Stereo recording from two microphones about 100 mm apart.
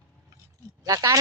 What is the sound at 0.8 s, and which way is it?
Speech, 35° right (ahead or behind).